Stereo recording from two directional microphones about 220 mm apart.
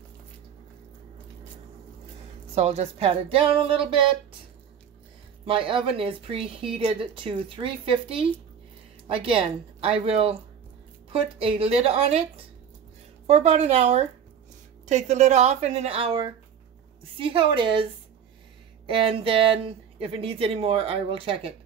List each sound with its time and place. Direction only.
2.5 s speech: 30° right (ahead or behind)
5.4 s speech: 25° right (ahead or behind)
13.3 s a woman's voice: 30° right (ahead or behind)
18.9 s speech: 25° right (ahead or behind)